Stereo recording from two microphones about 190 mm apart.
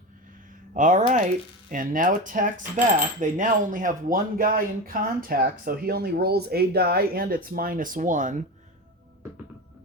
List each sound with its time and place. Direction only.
0.7 s speech: 40° right (ahead or behind)